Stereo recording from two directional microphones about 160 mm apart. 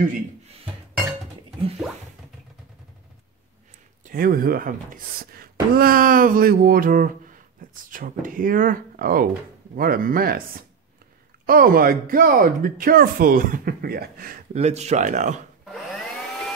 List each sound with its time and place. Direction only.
4.1 s speech: 65° right (ahead or behind)
11.4 s speech: 65° right (ahead or behind)
14.5 s speech: 45° right (ahead or behind)
15.6 s vacuum cleaner: centre (ahead or behind)